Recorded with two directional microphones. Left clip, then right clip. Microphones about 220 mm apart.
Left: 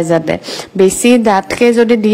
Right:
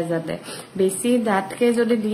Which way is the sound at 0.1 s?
40° left (ahead or behind).